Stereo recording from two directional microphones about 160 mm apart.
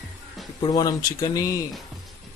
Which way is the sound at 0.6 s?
25° left (ahead or behind).